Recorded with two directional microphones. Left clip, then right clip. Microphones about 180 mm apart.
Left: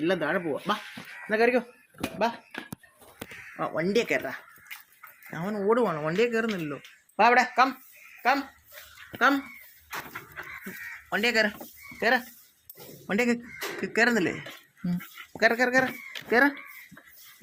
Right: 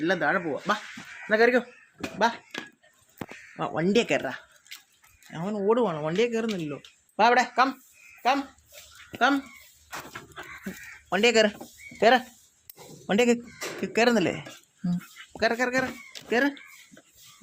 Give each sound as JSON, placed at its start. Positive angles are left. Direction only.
{"t": 0.0, "sound": "speech", "side_deg": 0}
{"t": 2.5, "sound": "a sound", "side_deg": -30}
{"t": 3.5, "sound": "speech", "side_deg": -35}
{"t": 5.3, "sound": "speech", "side_deg": -5}
{"t": 11.1, "sound": "speech", "side_deg": -45}
{"t": 13.1, "sound": "speech", "side_deg": -30}
{"t": 15.3, "sound": "speech", "side_deg": -5}